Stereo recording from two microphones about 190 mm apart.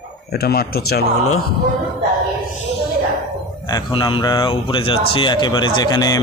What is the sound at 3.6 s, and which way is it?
Speech, 25° left (ahead or behind).